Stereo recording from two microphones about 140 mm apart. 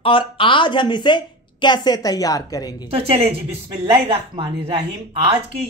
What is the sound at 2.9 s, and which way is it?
A woman's voice, 45° right (ahead or behind).